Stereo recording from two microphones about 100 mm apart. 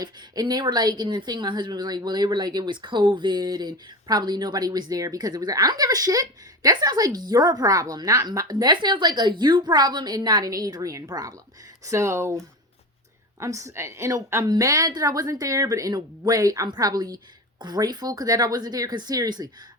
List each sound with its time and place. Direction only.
0.0 s a woman's voice: 45° right (ahead or behind)
13.4 s speech: 30° right (ahead or behind)